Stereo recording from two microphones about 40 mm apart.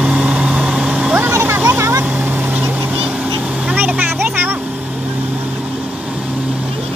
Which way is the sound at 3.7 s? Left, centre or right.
Right.